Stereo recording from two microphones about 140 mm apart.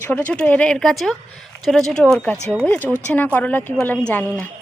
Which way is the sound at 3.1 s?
10° left (ahead or behind).